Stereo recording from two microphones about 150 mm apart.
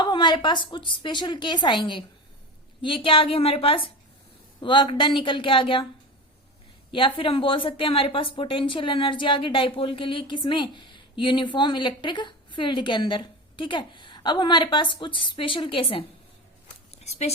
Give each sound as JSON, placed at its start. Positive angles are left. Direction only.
{"t": 0.0, "sound": "a woman's voice", "side_deg": 30}
{"t": 6.9, "sound": "a woman's voice", "side_deg": 35}
{"t": 17.0, "sound": "speech", "side_deg": 45}